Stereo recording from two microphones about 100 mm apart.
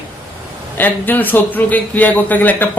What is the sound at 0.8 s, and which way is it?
A man's voice, 20° left (ahead or behind).